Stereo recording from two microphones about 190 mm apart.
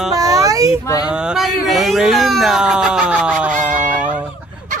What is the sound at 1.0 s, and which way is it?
Speech, 5° right (ahead or behind).